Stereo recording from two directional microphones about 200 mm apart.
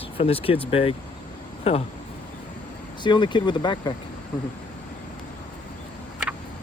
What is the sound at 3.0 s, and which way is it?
Speech, 20° left (ahead or behind).